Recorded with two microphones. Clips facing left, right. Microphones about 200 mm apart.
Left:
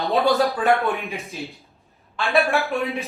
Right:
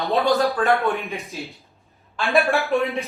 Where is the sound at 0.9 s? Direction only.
Centre (ahead or behind).